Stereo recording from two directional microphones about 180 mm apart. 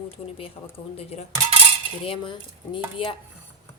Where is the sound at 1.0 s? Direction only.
35° left (ahead or behind).